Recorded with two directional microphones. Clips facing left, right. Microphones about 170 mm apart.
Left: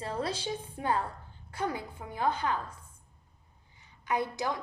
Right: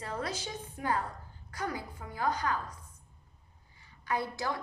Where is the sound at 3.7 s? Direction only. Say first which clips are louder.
Left 2 dB; 20° left (ahead or behind).